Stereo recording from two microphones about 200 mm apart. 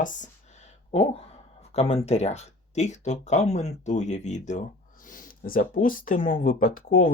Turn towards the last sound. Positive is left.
turn(degrees=45)  # may be behind; listen again after turning